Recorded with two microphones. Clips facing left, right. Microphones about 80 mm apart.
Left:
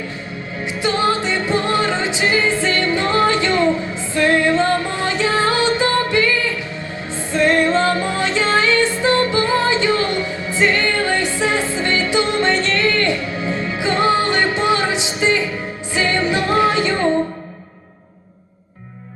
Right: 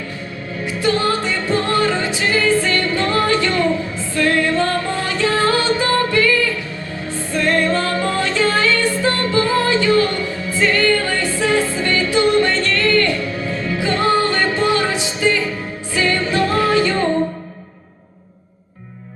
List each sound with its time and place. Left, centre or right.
0.6 s music: centre